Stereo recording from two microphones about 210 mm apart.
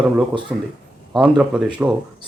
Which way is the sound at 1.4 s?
5° right (ahead or behind).